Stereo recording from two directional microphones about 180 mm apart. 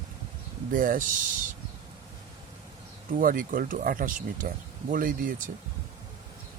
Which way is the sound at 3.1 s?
50° right (ahead or behind).